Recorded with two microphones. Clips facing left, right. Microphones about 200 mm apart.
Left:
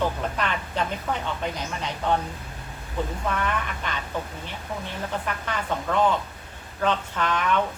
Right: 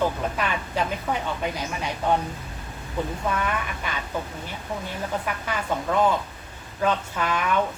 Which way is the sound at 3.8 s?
10° right (ahead or behind).